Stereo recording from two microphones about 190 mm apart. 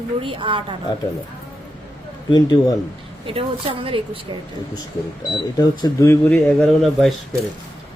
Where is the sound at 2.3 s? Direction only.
20° left (ahead or behind).